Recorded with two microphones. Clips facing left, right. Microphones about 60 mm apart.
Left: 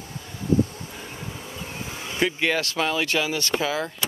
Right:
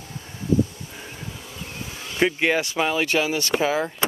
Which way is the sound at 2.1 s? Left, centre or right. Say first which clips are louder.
Right 3 dB; centre.